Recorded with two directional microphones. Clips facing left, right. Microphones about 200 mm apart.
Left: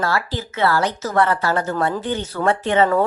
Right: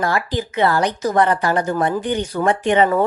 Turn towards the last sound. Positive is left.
turn(degrees=-15)  # may be behind; listen again after turning